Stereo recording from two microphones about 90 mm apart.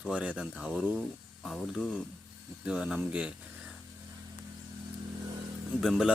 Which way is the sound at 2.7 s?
10° right (ahead or behind).